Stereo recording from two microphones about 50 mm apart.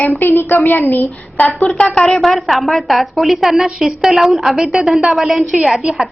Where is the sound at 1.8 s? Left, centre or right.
Centre.